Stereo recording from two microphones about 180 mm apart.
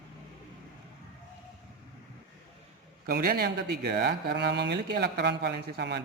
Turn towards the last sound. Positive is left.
turn(degrees=-65)  # may be behind; listen again after turning